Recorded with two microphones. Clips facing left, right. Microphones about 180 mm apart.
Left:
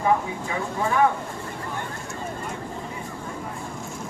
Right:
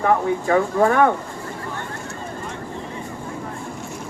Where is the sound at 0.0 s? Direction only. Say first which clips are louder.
Right 4 dB; 60° right (ahead or behind).